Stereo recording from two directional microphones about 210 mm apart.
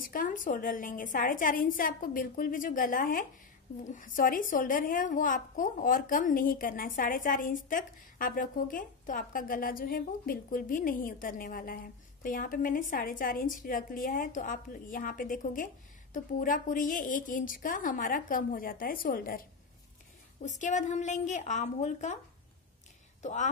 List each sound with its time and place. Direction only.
0.0 s a woman's voice: 40° left (ahead or behind)
20.4 s a woman's voice: 35° left (ahead or behind)
23.2 s a woman's voice: 35° left (ahead or behind)